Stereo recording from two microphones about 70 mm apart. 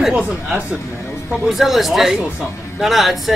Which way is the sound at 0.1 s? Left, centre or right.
Centre.